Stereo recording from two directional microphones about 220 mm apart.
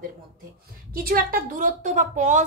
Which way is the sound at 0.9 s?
40° right (ahead or behind).